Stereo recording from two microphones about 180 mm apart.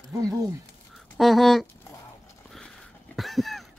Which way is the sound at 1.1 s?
Centre (ahead or behind).